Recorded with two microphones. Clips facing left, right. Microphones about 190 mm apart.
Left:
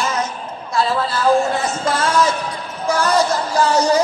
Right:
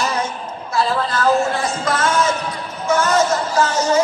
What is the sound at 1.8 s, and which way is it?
Speech, 30° left (ahead or behind).